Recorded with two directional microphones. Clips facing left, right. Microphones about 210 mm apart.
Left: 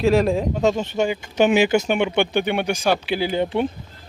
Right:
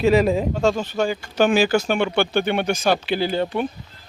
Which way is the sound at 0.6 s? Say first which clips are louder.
Left 2 dB; 20° left (ahead or behind).